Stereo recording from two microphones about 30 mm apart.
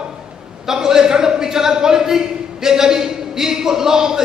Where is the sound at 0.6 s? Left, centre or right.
Centre.